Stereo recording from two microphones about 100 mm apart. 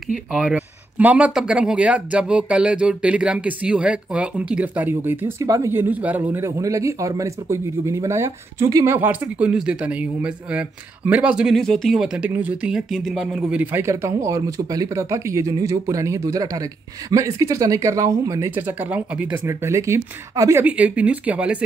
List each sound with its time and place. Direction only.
0.3 s speech: 10° right (ahead or behind)
5.4 s speech: 30° right (ahead or behind)
5.8 s speech: 15° right (ahead or behind)
6.6 s speech: 30° right (ahead or behind)
8.9 s speech: 20° right (ahead or behind)
13.0 s speech: 5° left (ahead or behind)
13.3 s speech: 10° right (ahead or behind)
14.0 s speech: 35° right (ahead or behind)
18.5 s speech: 20° right (ahead or behind)
19.4 s speech: 30° right (ahead or behind)
20.6 s speech: 15° right (ahead or behind)